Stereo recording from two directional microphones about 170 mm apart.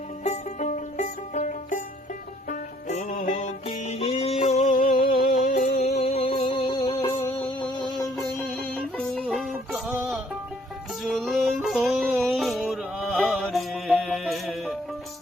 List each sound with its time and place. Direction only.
0.3 s music: 45° left (ahead or behind)
3.7 s music: 35° left (ahead or behind)
7.3 s music: 5° left (ahead or behind)